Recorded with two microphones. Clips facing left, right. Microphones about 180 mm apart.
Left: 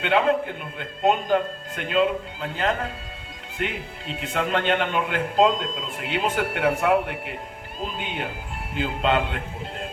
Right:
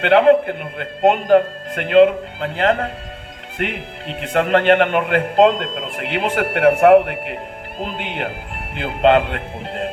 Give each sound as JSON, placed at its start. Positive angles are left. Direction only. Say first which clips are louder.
{"t": 0.0, "sound": "a man's voice", "louder": "right 9 dB", "side_deg": -65}